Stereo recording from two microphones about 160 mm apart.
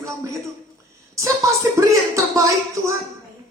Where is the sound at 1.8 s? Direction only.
20° right (ahead or behind).